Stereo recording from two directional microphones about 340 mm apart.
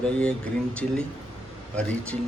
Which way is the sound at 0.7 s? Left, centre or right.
Centre.